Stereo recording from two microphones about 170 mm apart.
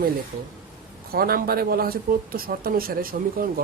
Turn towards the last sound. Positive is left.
turn(degrees=-55)  # may be behind; listen again after turning